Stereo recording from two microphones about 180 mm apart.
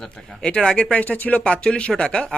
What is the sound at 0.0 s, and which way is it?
Speech, 5° left (ahead or behind).